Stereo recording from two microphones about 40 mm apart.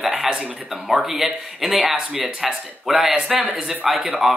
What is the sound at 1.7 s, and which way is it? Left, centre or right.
Speech, right.